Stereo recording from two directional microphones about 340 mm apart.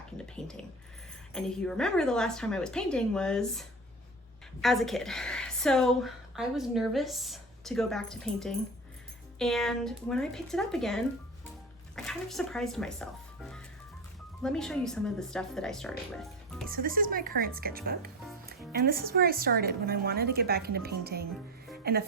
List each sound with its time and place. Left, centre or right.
0.2 s a woman's voice: centre
16.6 s speech: right